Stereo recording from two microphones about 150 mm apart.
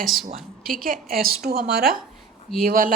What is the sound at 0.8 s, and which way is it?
A woman's voice, 75° right (ahead or behind).